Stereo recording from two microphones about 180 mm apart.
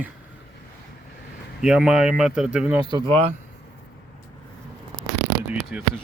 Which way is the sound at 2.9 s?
30° right (ahead or behind).